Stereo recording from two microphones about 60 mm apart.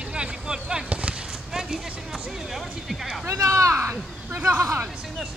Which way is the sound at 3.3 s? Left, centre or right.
Right.